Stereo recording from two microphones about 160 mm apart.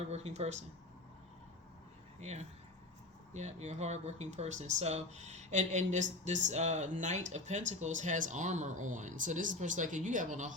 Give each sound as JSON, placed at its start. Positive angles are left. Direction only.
{"t": 0.1, "sound": "speech", "side_deg": -45}
{"t": 2.2, "sound": "speech", "side_deg": -45}